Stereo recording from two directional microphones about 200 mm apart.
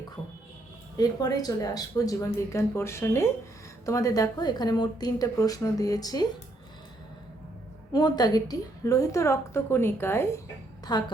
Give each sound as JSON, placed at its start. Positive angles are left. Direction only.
{"t": 0.9, "sound": "a woman's voice", "side_deg": 20}
{"t": 7.9, "sound": "a woman's voice", "side_deg": 20}